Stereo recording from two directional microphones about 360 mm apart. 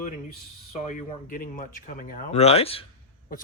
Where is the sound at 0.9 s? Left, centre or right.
Left.